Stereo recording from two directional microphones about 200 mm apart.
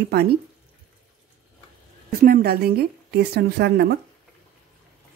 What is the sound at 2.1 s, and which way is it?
A woman's voice, 45° right (ahead or behind).